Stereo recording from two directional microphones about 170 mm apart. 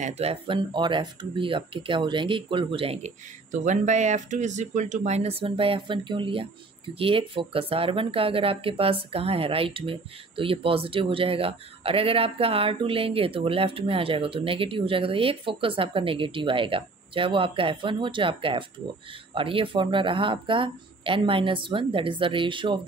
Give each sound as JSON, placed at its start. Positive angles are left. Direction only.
{"t": 0.0, "sound": "speech", "side_deg": -40}
{"t": 3.5, "sound": "speech", "side_deg": -45}